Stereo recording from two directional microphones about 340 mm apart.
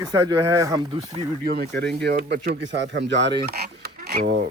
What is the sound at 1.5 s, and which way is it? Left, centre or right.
Speech, right.